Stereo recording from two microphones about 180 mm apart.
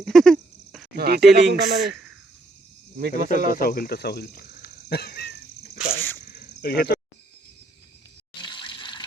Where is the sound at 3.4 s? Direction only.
55° left (ahead or behind).